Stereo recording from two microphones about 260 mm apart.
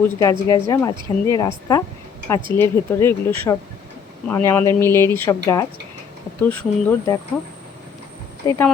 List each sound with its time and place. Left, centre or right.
0.0 s speech: centre
8.4 s speech: centre